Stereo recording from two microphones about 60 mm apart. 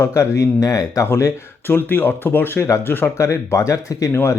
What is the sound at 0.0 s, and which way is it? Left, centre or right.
Speech, left.